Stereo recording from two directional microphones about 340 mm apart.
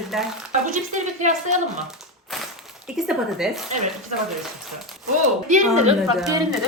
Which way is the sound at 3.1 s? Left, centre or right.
Centre.